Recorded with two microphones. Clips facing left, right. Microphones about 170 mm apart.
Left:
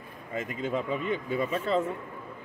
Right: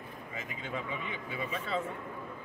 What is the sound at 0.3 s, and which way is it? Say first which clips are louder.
Speech: left 10 dB; 50° left (ahead or behind).